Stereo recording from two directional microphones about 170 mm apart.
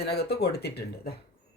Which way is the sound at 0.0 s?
70° left (ahead or behind).